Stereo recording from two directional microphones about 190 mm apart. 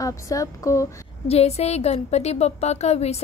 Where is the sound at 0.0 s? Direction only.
15° left (ahead or behind).